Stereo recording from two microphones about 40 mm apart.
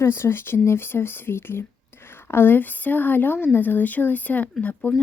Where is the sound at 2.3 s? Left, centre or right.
Left.